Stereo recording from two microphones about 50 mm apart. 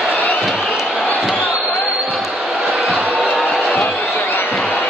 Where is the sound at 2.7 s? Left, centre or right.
Right.